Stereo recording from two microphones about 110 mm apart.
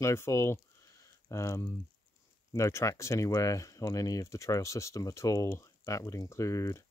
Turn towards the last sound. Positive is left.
turn(degrees=30)  # may be behind; listen again after turning